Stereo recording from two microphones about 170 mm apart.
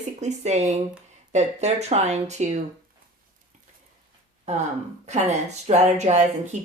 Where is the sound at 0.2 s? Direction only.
40° right (ahead or behind).